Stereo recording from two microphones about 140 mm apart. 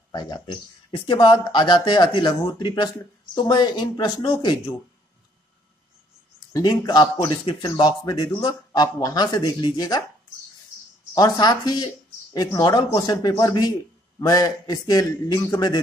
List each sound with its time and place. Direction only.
0.1 s speech: 30° left (ahead or behind)
6.5 s speech: 25° left (ahead or behind)
11.1 s speech: 30° left (ahead or behind)